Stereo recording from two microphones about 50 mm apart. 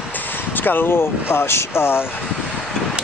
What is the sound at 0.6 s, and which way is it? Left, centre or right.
Speech, left.